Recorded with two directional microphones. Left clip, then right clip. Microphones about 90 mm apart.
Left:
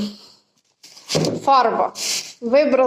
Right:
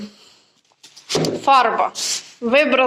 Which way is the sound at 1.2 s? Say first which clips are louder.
Right 1 dB; 20° left (ahead or behind).